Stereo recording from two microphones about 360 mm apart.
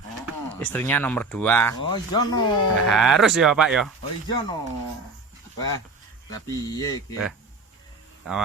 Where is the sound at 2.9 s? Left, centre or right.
Centre.